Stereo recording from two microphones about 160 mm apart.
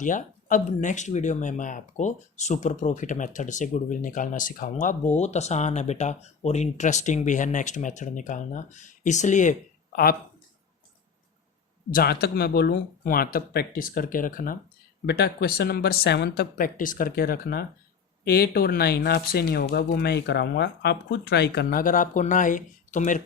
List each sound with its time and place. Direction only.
0.0 s speech: 55° left (ahead or behind); by 10.2 s 70° left (ahead or behind)
11.9 s speech: 70° left (ahead or behind)
15.0 s speech: 90° left; by 23.2 s 50° left (ahead or behind)